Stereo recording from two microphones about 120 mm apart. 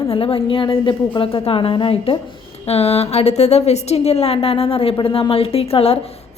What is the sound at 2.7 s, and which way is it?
A woman's voice, 60° left (ahead or behind).